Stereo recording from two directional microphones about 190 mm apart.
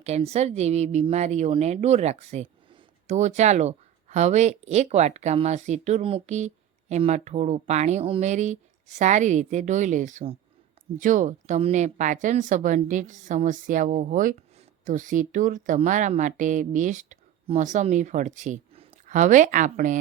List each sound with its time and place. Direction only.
0.0 s speech: 35° right (ahead or behind)